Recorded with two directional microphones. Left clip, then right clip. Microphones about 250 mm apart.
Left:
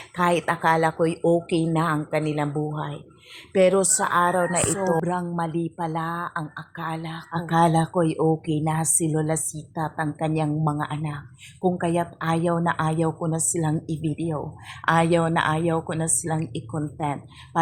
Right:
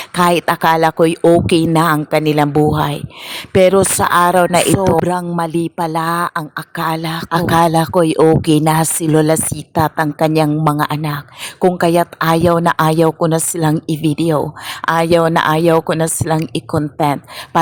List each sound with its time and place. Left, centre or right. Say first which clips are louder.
0.2 s speech: right 9 dB; right